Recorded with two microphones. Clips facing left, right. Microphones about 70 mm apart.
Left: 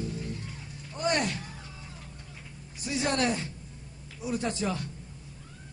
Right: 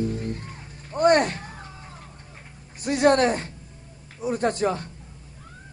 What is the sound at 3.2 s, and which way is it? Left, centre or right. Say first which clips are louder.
A man's voice: right 6 dB; right.